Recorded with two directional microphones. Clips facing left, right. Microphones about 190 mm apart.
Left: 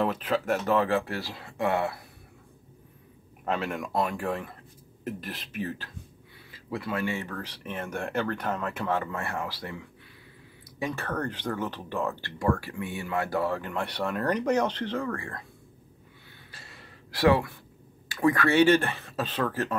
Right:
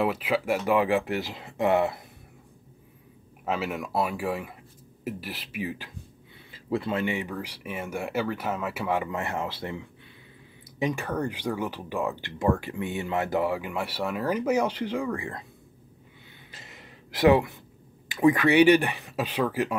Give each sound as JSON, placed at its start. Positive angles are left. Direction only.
{"t": 0.0, "sound": "speech", "side_deg": -10}
{"t": 3.4, "sound": "speech", "side_deg": -5}
{"t": 6.5, "sound": "speech", "side_deg": -25}
{"t": 16.5, "sound": "a sound", "side_deg": -20}
{"t": 18.0, "sound": "speech", "side_deg": -20}